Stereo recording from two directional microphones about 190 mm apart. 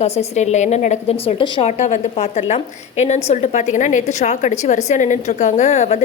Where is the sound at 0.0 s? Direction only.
35° left (ahead or behind).